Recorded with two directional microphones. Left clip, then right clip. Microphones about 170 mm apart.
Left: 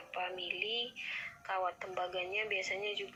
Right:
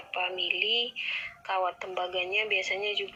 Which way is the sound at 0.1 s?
30° right (ahead or behind).